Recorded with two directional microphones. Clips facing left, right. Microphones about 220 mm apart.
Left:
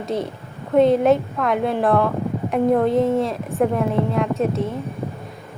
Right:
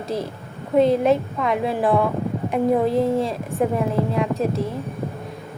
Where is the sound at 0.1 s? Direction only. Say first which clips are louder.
Left 2 dB; centre (ahead or behind).